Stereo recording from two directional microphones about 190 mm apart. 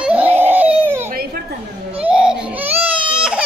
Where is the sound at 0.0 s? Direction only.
5° right (ahead or behind).